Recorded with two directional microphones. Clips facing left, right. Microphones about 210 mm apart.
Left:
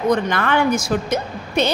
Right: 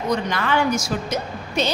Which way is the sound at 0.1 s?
55° left (ahead or behind).